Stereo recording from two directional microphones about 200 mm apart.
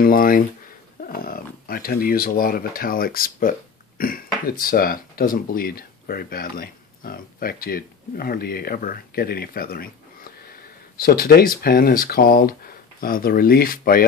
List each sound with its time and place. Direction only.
0.0 s speech: 45° left (ahead or behind)